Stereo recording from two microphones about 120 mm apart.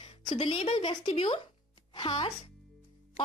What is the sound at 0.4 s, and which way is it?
Speech, 50° left (ahead or behind).